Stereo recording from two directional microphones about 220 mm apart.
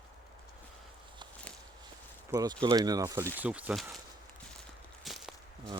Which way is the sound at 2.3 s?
15° right (ahead or behind).